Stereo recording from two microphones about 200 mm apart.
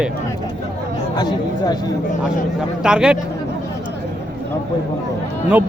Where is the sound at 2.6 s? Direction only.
5° right (ahead or behind).